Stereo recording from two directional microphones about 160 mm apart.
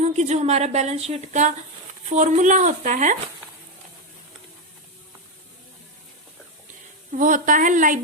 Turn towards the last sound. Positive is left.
turn(degrees=-55)  # may be behind; listen again after turning